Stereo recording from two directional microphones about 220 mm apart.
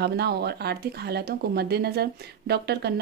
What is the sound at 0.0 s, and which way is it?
A woman's voice, 45° right (ahead or behind).